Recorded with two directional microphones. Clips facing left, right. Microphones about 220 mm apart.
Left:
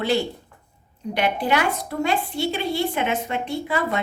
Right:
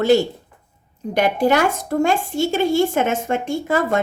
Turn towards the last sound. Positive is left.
turn(degrees=-45)  # may be behind; listen again after turning